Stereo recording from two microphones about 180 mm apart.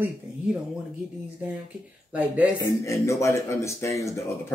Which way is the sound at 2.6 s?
15° left (ahead or behind).